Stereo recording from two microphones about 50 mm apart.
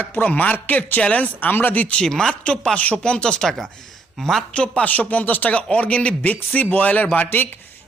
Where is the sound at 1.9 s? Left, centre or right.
Centre.